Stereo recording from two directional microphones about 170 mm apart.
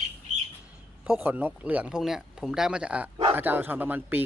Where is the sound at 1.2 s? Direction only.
10° right (ahead or behind).